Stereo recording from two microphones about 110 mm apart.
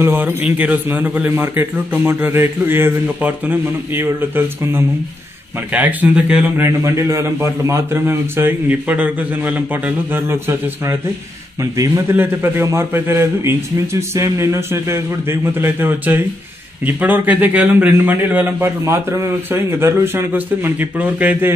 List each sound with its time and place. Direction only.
0.0 s a man's voice: 20° right (ahead or behind)
6.6 s a man's voice: 25° right (ahead or behind)
12.2 s a man's voice: 20° right (ahead or behind)